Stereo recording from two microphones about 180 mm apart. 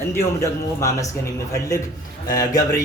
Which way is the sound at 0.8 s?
15° left (ahead or behind).